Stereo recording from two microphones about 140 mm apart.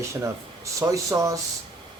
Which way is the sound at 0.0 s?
20° right (ahead or behind).